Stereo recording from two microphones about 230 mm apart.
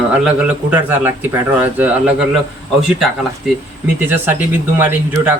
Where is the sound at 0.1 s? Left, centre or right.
Centre.